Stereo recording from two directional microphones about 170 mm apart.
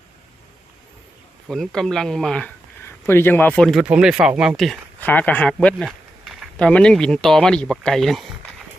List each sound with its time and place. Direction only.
1.5 s speech: centre (ahead or behind)